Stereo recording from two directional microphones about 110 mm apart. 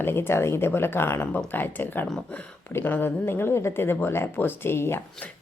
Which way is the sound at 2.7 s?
20° left (ahead or behind).